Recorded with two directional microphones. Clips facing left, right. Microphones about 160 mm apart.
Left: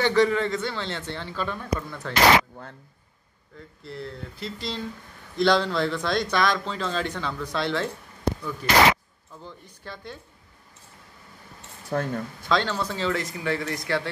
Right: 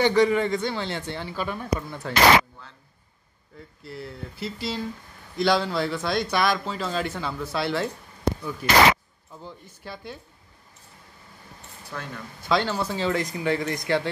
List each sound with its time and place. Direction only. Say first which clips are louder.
0.0 s speech: right 1 dB; 15° right (ahead or behind)
3.8 s speech: left 1 dB; 5° right (ahead or behind)
9.3 s speech: right 1 dB; 10° right (ahead or behind)
11.9 s speech: left 10 dB; 45° left (ahead or behind)
12.4 s speech: right 1 dB; 10° right (ahead or behind)